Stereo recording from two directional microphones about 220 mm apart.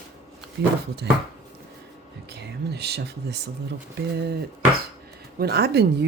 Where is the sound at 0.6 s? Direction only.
50° right (ahead or behind).